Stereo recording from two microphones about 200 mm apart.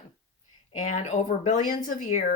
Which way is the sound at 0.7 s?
35° left (ahead or behind).